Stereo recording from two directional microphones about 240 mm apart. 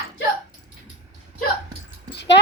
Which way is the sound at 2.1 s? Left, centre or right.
Left.